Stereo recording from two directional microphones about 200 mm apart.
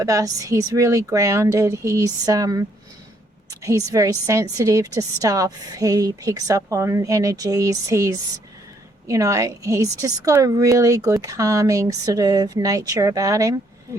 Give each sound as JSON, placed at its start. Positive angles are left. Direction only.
{"t": 0.0, "sound": "a woman's voice", "side_deg": -15}